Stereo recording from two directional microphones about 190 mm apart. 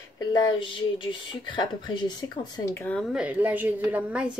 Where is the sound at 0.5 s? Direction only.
25° left (ahead or behind).